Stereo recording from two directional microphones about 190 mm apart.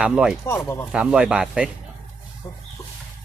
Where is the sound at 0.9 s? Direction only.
5° right (ahead or behind).